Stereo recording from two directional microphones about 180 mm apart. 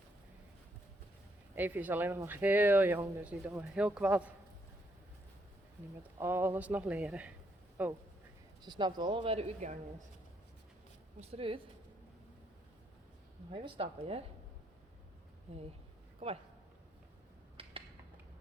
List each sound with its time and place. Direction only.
1.5 s speech: 10° right (ahead or behind)
6.0 s speech: 15° right (ahead or behind)
8.6 s speech: 25° right (ahead or behind); by 9.7 s 40° right (ahead or behind)
11.2 s speech: 35° right (ahead or behind)
13.5 s speech: 30° right (ahead or behind)
15.5 s speech: 35° right (ahead or behind)
17.6 s a sound: 30° right (ahead or behind)